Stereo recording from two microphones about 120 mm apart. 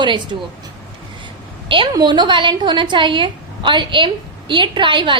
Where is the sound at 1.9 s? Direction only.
35° right (ahead or behind).